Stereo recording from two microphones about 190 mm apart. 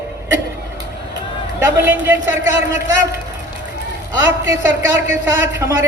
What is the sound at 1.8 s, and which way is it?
A man's voice, 15° right (ahead or behind).